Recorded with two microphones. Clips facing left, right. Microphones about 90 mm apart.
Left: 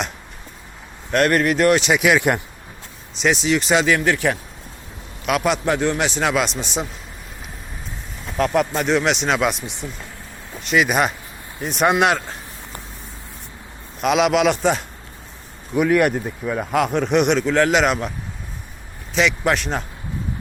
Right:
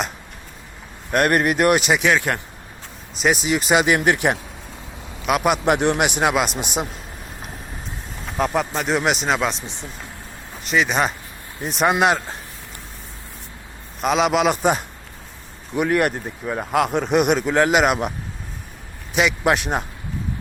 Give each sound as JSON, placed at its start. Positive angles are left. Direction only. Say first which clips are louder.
{"t": 1.1, "sound": "speech", "louder": "left 1 dB", "side_deg": -10}
{"t": 2.1, "sound": "speech", "louder": "left 3 dB", "side_deg": 20}
{"t": 3.2, "sound": "speech", "louder": "left 1 dB", "side_deg": -5}
{"t": 3.9, "sound": "a man's voice", "louder": "right 1 dB", "side_deg": -20}
{"t": 5.2, "sound": "a man's voice", "louder": "right 1 dB", "side_deg": -5}
{"t": 5.6, "sound": "speech", "louder": "right 2 dB", "side_deg": -20}
{"t": 8.4, "sound": "speech", "louder": "left 3 dB", "side_deg": -5}
{"t": 10.6, "sound": "speech", "louder": "left 2 dB", "side_deg": 0}
{"t": 14.0, "sound": "speech", "louder": "left 1 dB", "side_deg": 0}
{"t": 19.1, "sound": "speech", "louder": "even", "side_deg": -10}